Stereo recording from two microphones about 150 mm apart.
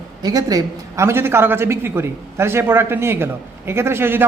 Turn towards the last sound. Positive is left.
turn(degrees=-15)  # may be behind; listen again after turning